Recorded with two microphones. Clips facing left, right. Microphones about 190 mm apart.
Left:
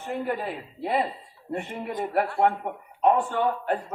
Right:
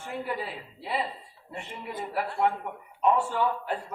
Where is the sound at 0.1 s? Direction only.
50° left (ahead or behind).